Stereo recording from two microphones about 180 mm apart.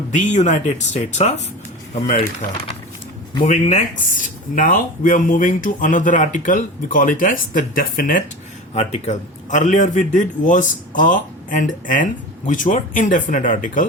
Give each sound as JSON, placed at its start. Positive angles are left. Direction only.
{"t": 0.2, "sound": "speech", "side_deg": 40}
{"t": 3.4, "sound": "speech", "side_deg": 40}